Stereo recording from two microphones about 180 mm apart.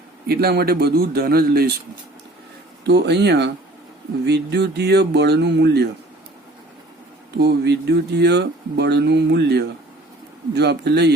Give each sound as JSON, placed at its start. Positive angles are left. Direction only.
{"t": 0.3, "sound": "speech", "side_deg": -60}
{"t": 2.8, "sound": "speech", "side_deg": -70}
{"t": 7.3, "sound": "speech", "side_deg": -65}